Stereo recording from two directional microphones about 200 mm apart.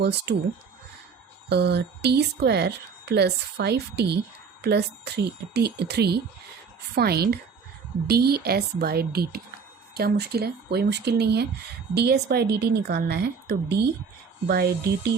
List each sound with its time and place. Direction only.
0.0 s speech: 55° right (ahead or behind)
1.5 s speech: 55° right (ahead or behind)